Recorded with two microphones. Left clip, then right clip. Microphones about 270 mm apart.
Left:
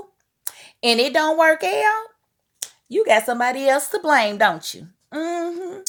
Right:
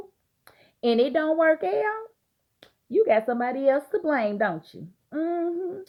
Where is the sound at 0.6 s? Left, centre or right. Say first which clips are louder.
Left 4 dB; left.